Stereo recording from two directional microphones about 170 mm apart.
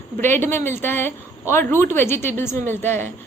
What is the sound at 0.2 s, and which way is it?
A woman's voice, 15° left (ahead or behind).